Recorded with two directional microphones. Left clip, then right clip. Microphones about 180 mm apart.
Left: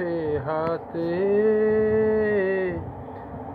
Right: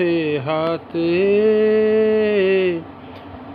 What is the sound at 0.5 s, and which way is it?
Mantra, 35° right (ahead or behind).